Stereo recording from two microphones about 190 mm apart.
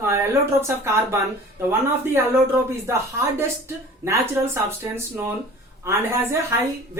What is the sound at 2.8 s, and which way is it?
A woman's voice, 15° right (ahead or behind).